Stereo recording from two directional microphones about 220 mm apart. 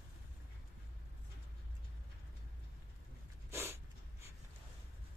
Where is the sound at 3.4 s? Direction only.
10° right (ahead or behind).